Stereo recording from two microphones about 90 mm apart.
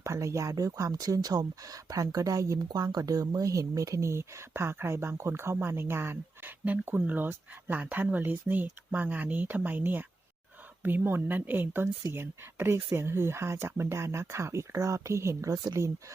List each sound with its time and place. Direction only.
0.0 s speech: 35° right (ahead or behind)